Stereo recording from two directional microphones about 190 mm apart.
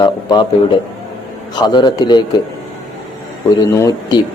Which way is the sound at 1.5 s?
25° left (ahead or behind).